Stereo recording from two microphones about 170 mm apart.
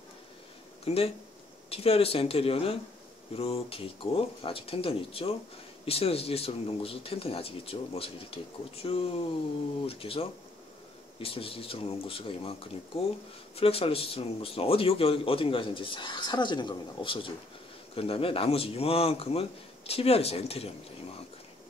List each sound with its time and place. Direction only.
0.8 s speech: 35° left (ahead or behind)